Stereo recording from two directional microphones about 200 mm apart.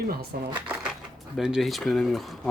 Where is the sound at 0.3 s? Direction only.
50° right (ahead or behind).